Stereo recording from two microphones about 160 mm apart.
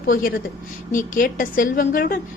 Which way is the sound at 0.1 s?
60° left (ahead or behind).